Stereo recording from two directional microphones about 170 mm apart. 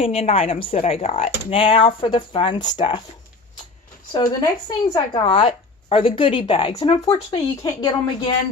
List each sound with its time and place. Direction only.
0.0 s speech: 35° left (ahead or behind)
4.1 s speech: 25° left (ahead or behind)